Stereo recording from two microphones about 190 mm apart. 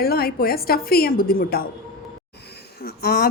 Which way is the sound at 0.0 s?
55° left (ahead or behind).